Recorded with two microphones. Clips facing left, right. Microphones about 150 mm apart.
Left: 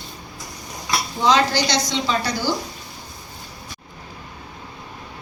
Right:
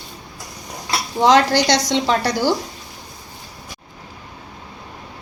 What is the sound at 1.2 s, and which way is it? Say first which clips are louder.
A woman's voice: right 5 dB; 65° right (ahead or behind).